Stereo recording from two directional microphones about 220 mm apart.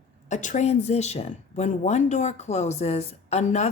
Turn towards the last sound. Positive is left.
turn(degrees=30)  # may be behind; listen again after turning